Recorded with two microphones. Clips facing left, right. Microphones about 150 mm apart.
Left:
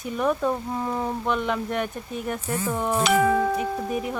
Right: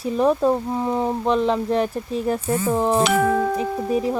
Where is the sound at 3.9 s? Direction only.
30° right (ahead or behind).